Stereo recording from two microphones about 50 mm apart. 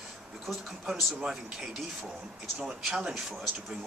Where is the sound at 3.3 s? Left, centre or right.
Centre.